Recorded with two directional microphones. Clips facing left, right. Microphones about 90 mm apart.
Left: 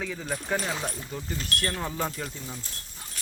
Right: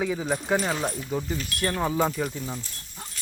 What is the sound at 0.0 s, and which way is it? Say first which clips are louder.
Speech: right 6 dB; 15° right (ahead or behind).